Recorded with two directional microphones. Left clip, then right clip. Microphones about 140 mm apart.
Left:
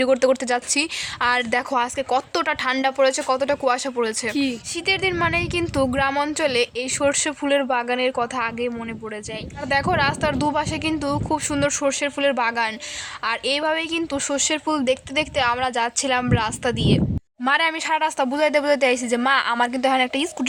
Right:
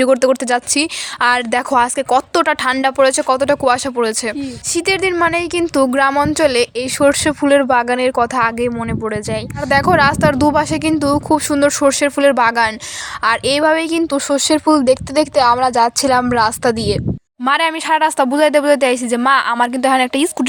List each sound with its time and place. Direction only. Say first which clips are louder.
0.0 s speech: right 5 dB; 30° right (ahead or behind)
5.1 s speech: right 6 dB; 30° right (ahead or behind)
6.1 s a woman's voice: right 8 dB; 25° right (ahead or behind)
6.3 s speech: right 7 dB; 35° right (ahead or behind)
17.4 s a woman's voice: right 5 dB; 25° right (ahead or behind)